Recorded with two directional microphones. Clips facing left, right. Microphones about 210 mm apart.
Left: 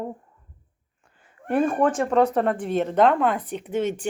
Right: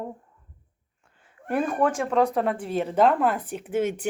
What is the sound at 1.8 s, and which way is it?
Speech, 10° right (ahead or behind).